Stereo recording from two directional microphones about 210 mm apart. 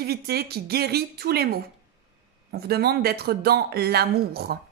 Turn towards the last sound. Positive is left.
turn(degrees=-50)  # may be behind; listen again after turning